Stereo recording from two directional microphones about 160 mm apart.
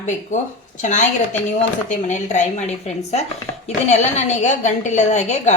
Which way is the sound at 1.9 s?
50° left (ahead or behind).